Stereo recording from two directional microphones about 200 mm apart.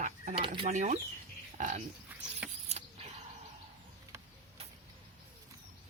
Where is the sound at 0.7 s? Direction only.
40° right (ahead or behind).